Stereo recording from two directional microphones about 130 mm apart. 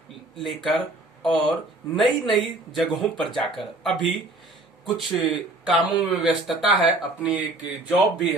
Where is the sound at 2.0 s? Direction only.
Centre (ahead or behind).